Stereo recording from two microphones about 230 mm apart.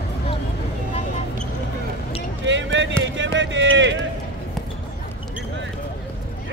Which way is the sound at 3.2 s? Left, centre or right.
Right.